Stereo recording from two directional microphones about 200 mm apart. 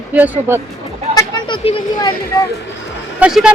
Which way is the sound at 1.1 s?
20° left (ahead or behind).